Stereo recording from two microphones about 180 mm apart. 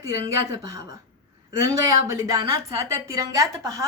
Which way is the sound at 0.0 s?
15° right (ahead or behind).